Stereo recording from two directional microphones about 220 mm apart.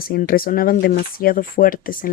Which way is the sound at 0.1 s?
40° left (ahead or behind).